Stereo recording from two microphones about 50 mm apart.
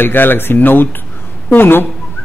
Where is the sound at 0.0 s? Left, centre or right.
Left.